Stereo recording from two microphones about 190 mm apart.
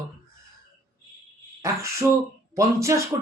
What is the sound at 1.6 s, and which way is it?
Speech, 15° right (ahead or behind).